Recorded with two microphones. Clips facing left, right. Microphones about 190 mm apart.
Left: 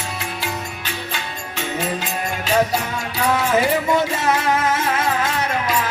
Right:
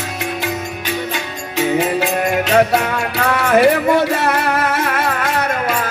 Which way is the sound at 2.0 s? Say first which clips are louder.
Right 8 dB; 65° right (ahead or behind).